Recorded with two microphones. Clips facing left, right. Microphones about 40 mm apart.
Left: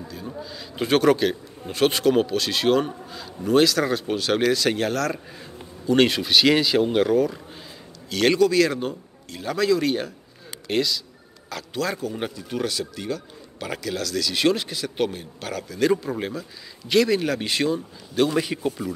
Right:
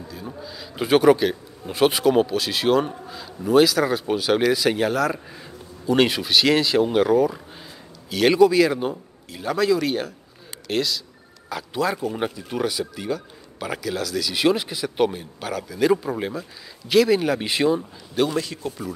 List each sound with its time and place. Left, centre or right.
0.0 s speech: centre
18.3 s speech: centre